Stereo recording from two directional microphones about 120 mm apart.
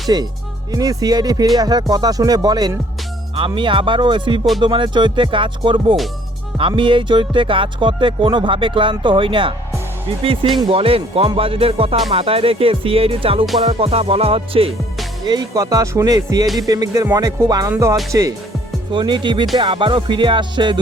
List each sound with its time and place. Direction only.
0.1 s music: 35° right (ahead or behind)
3.3 s speech: 45° right (ahead or behind)
15.3 s music: 30° right (ahead or behind)
18.9 s music: 40° right (ahead or behind)